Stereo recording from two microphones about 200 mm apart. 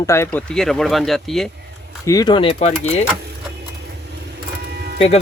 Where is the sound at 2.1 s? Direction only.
20° left (ahead or behind).